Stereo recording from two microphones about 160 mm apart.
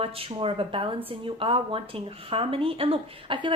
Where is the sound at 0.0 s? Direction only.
35° right (ahead or behind).